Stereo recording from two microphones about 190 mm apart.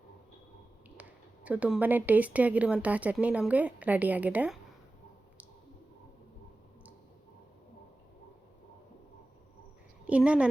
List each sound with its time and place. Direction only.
1.5 s speech: 5° right (ahead or behind)
10.1 s a woman's voice: 5° right (ahead or behind)